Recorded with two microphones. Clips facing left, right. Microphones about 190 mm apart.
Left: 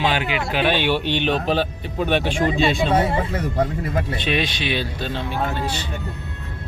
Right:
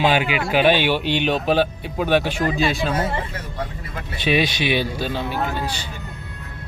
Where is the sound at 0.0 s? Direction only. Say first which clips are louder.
Right 3 dB; 10° right (ahead or behind).